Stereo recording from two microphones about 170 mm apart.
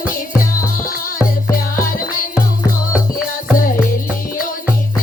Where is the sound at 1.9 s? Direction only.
55° left (ahead or behind).